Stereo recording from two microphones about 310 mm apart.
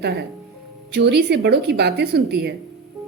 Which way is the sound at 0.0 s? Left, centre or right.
Right.